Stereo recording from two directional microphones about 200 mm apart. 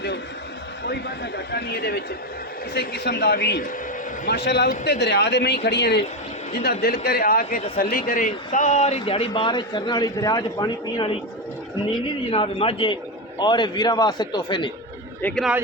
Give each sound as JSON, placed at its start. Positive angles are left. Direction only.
{"t": 0.9, "sound": "a man's voice", "side_deg": 55}
{"t": 12.3, "sound": "a man's voice", "side_deg": 30}
{"t": 15.2, "sound": "speech", "side_deg": 10}